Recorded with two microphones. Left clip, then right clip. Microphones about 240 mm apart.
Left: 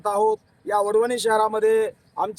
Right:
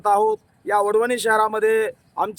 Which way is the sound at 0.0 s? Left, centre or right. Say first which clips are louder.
Right 3 dB; centre.